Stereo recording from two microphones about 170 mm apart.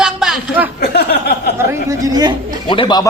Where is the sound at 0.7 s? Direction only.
65° left (ahead or behind).